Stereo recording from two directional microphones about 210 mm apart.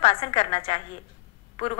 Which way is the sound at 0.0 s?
30° left (ahead or behind).